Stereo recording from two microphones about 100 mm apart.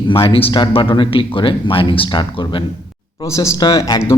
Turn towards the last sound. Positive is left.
turn(degrees=30)  # may be behind; listen again after turning